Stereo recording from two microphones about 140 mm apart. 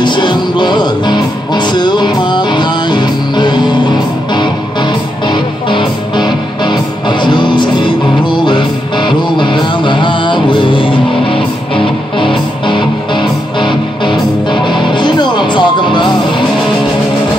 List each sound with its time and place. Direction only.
0.0 s music: 35° left (ahead or behind)